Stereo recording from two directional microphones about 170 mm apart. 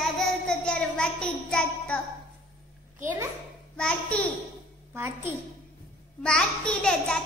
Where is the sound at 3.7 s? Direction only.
5° left (ahead or behind).